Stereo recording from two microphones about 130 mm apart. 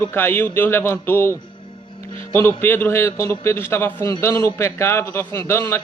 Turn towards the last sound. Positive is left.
turn(degrees=20)  # may be behind; listen again after turning